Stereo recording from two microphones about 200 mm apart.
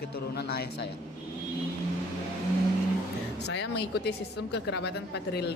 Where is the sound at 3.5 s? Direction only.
60° left (ahead or behind).